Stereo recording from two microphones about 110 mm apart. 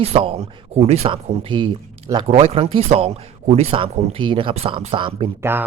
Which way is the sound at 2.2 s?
70° right (ahead or behind).